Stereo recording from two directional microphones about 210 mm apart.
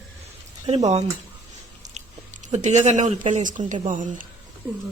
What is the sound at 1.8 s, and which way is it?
Chewing, 35° right (ahead or behind).